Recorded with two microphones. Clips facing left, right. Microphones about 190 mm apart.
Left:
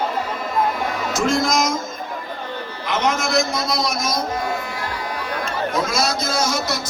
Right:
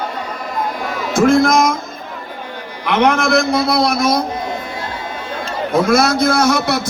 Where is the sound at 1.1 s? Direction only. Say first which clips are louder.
Right 9 dB; 55° right (ahead or behind).